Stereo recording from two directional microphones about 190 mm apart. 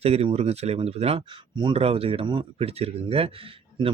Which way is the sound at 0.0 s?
30° right (ahead or behind).